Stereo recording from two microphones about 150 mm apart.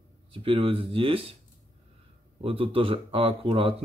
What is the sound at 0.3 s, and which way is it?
Speech, 35° right (ahead or behind).